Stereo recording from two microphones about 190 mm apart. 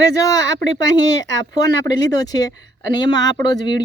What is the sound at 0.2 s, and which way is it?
A woman's voice, 20° left (ahead or behind).